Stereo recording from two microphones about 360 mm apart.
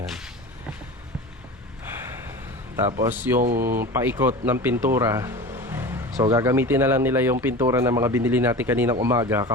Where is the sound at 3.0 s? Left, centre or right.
Centre.